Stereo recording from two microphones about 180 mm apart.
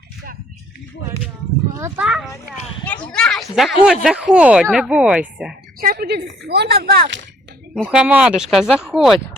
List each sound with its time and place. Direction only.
1.7 s a child's voice: 15° right (ahead or behind)
2.0 s a woman's voice: centre (ahead or behind)
5.8 s a woman's voice: 55° right (ahead or behind)
7.7 s a woman's voice: 5° right (ahead or behind)